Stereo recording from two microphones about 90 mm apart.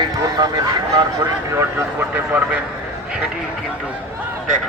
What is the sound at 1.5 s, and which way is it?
Speech, 30° right (ahead or behind).